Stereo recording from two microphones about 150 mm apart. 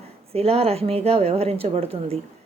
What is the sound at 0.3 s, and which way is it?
A woman's voice, 40° right (ahead or behind).